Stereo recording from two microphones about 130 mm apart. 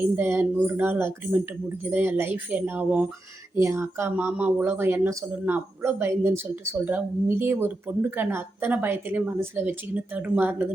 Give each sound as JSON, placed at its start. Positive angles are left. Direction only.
{"t": 0.2, "sound": "speech", "side_deg": -15}